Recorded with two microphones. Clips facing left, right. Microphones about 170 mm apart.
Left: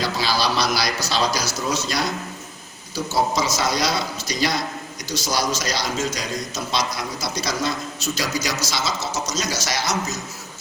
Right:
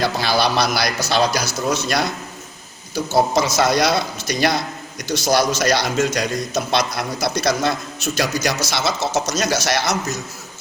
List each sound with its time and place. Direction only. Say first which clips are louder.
0.0 s a man's voice: right 4 dB; 60° right (ahead or behind)